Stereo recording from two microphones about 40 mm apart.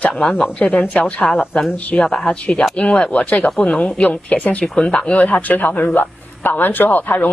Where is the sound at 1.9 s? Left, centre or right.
Left.